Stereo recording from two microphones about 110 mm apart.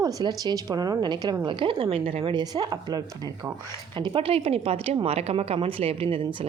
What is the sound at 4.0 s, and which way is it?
A woman's voice, 45° right (ahead or behind).